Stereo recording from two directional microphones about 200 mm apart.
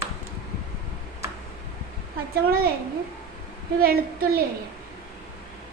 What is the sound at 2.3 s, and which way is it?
Speech, 50° right (ahead or behind).